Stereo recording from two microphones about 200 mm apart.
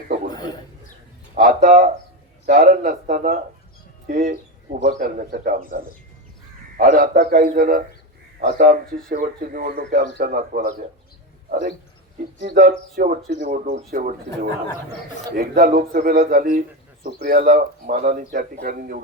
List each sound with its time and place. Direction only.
1.4 s a man's voice: 40° right (ahead or behind)